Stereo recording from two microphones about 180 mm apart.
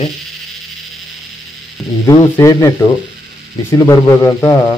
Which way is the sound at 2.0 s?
15° left (ahead or behind).